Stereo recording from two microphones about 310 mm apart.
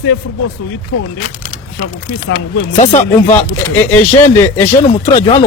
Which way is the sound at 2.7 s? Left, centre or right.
Left.